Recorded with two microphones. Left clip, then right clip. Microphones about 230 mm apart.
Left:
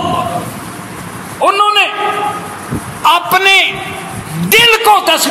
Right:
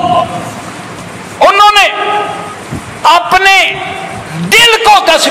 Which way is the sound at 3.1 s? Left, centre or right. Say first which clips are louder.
Right 3 dB; left.